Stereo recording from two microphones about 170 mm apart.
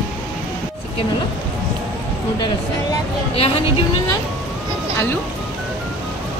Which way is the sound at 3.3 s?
35° left (ahead or behind).